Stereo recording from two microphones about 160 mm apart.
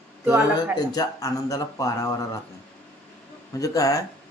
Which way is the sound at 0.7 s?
25° left (ahead or behind).